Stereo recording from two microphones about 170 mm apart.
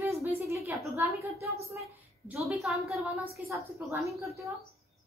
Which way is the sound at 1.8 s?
Centre (ahead or behind).